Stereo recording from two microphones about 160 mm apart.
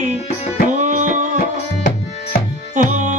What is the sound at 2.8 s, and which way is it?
Music, 50° right (ahead or behind).